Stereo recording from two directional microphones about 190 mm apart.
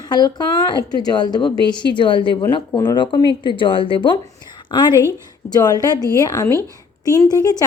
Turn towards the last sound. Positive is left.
turn(degrees=20)  # may be behind; listen again after turning